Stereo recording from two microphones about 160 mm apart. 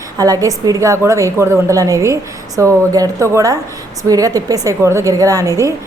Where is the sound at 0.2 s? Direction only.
20° right (ahead or behind).